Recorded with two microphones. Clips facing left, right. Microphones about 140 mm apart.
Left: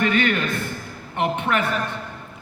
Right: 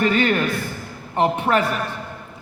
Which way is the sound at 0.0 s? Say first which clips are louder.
Right 2 dB; 35° right (ahead or behind).